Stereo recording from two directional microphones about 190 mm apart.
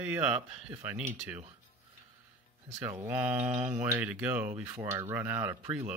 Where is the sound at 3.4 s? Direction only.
35° right (ahead or behind).